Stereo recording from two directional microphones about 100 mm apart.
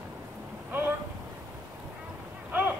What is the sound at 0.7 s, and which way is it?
Vehicle, 20° right (ahead or behind).